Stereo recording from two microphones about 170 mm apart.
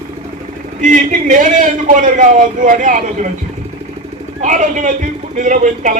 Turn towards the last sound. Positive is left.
turn(degrees=-50)  # may be behind; listen again after turning